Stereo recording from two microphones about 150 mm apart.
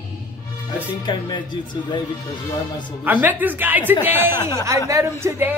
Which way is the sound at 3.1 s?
10° right (ahead or behind).